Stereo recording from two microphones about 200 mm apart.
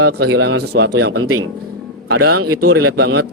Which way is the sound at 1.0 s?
90° right.